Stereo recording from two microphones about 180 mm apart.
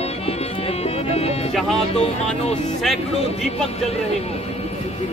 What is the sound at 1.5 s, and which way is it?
Speech, centre (ahead or behind).